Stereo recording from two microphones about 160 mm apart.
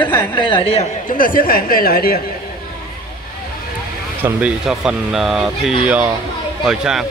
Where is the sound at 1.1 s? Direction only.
60° left (ahead or behind).